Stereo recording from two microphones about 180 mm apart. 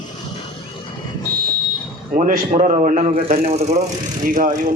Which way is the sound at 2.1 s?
45° right (ahead or behind).